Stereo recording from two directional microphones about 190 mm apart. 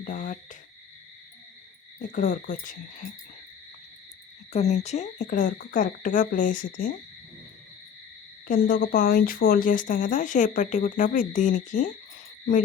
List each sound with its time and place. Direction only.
0.0 s speech: 45° left (ahead or behind)
2.0 s speech: 45° left (ahead or behind)
4.5 s speech: 35° left (ahead or behind)
8.4 s speech: 50° left (ahead or behind)